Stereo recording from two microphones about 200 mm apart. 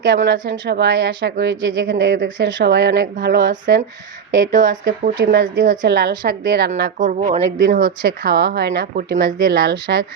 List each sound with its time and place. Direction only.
0.0 s speech: 55° right (ahead or behind)
5.1 s speech: 55° right (ahead or behind)
7.0 s speech: 35° right (ahead or behind); by 10.1 s 55° right (ahead or behind)